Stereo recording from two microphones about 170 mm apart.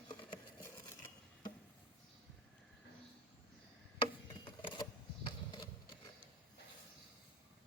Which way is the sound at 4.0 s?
30° left (ahead or behind).